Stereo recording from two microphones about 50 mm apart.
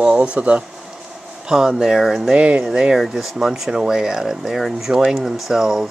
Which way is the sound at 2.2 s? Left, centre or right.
Right.